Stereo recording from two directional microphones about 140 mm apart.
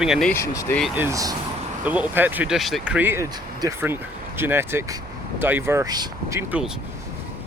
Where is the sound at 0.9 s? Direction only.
20° right (ahead or behind).